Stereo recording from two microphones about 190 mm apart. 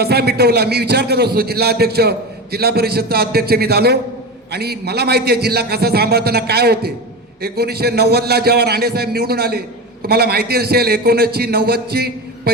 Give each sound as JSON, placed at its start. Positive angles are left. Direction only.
{"t": 0.0, "sound": "a man's voice", "side_deg": -55}